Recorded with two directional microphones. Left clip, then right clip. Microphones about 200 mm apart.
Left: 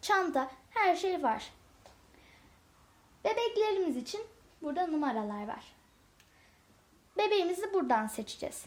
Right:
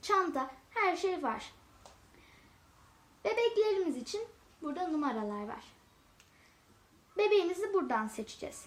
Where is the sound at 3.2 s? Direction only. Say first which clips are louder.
Even; 35° left (ahead or behind).